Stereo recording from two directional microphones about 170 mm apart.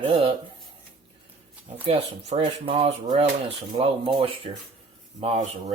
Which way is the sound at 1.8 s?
30° right (ahead or behind).